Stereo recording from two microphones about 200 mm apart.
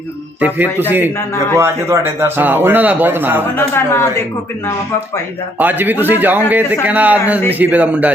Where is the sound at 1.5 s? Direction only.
15° right (ahead or behind).